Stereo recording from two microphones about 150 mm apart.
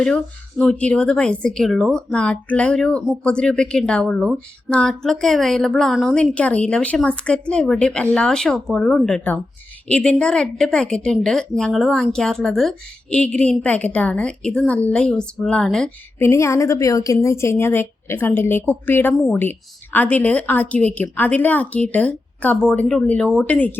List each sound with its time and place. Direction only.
0.6 s speech: 5° left (ahead or behind)
16.2 s a woman's voice: 20° left (ahead or behind)